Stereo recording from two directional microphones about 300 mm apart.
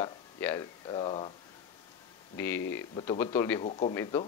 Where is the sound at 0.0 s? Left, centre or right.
Centre.